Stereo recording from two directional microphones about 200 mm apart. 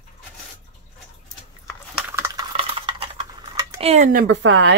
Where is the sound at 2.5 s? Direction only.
30° right (ahead or behind).